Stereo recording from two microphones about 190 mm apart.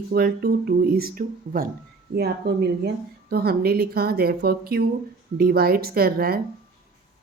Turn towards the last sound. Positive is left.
turn(degrees=-55)  # may be behind; listen again after turning